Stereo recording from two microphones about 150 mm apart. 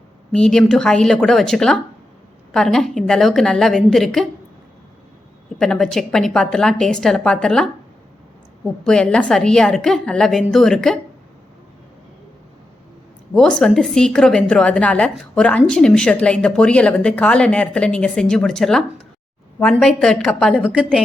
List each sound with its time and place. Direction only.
0.3 s a woman's voice: 5° left (ahead or behind)
5.5 s a woman's voice: 5° left (ahead or behind)
8.8 s a woman's voice: 5° left (ahead or behind)
13.3 s a woman's voice: 5° left (ahead or behind)
20.6 s a woman's voice: 5° right (ahead or behind)